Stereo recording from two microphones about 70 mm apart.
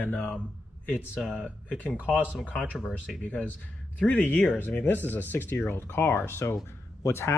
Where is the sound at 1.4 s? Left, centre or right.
Left.